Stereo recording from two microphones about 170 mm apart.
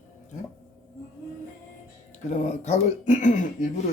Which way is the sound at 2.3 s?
45° left (ahead or behind).